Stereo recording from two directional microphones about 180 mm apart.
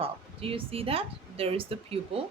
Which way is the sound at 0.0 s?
30° right (ahead or behind).